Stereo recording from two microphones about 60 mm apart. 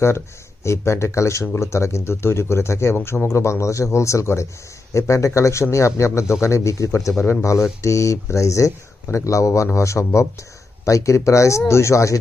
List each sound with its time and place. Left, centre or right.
0.7 s speech: left
3.3 s speech: left